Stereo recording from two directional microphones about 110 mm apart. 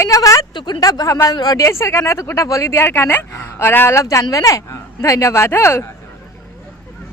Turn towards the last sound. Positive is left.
turn(degrees=25)  # may be behind; listen again after turning